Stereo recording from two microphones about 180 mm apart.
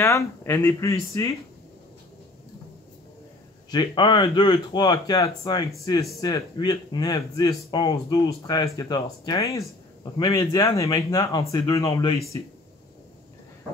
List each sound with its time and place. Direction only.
0.0 s speech: 15° left (ahead or behind)
3.7 s speech: 25° left (ahead or behind)